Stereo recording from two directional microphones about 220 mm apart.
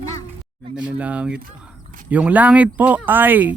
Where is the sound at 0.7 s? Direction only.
5° right (ahead or behind).